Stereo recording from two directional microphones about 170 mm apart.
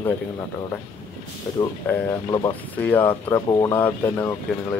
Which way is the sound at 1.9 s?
10° left (ahead or behind).